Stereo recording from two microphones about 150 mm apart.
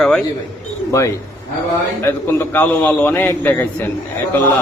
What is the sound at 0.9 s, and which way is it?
A man's voice, 20° left (ahead or behind).